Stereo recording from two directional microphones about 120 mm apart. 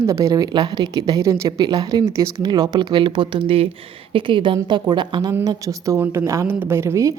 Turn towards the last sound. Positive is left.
turn(degrees=-25)  # may be behind; listen again after turning